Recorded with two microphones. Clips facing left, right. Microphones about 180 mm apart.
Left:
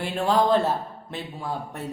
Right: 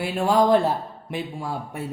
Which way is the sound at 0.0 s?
10° right (ahead or behind).